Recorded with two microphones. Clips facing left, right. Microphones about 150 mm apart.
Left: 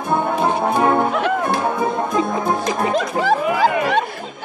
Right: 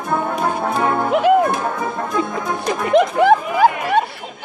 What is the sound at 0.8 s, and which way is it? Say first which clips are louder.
Music: left 3 dB; 25° left (ahead or behind).